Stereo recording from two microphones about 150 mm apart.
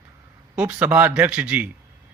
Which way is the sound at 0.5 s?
10° right (ahead or behind).